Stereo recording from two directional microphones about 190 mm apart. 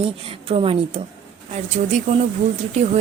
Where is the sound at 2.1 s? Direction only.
35° right (ahead or behind).